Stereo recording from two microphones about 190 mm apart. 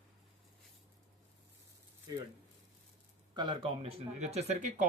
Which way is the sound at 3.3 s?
25° right (ahead or behind).